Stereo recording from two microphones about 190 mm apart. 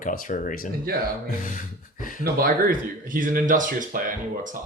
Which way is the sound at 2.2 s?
50° right (ahead or behind).